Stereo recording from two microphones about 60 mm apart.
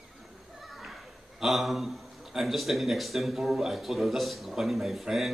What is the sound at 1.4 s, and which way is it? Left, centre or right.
A man's voice, centre.